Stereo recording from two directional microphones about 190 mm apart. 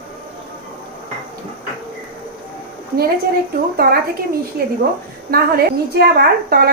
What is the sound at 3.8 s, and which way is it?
A woman's voice, 50° right (ahead or behind).